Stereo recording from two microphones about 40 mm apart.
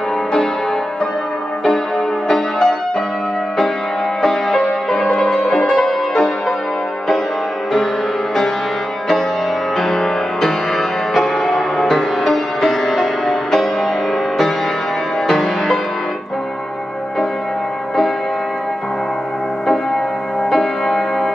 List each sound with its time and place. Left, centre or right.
2.2 s music: centre
4.2 s music: centre
9.8 s music: centre
15.2 s music: centre
20.4 s music: centre